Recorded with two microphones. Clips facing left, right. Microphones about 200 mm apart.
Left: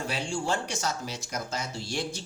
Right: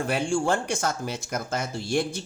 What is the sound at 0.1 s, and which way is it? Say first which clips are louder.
Speech: right 7 dB; 55° right (ahead or behind).